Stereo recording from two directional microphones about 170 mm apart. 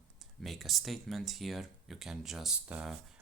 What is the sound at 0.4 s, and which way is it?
Speech, centre (ahead or behind).